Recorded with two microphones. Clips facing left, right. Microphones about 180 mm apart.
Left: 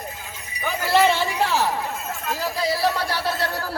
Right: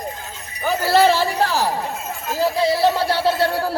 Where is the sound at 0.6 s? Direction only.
35° right (ahead or behind).